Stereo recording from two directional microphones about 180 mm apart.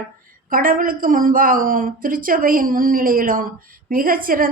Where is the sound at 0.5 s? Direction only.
50° right (ahead or behind).